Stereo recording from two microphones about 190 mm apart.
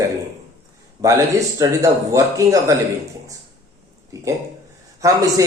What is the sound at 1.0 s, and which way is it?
Speech, 15° right (ahead or behind).